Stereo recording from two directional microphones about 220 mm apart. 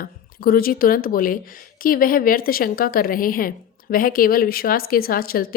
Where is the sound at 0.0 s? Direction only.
45° left (ahead or behind).